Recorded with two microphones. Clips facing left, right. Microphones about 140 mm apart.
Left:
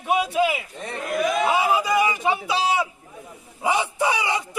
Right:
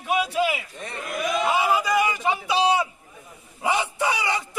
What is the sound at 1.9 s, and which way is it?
Speech, centre (ahead or behind).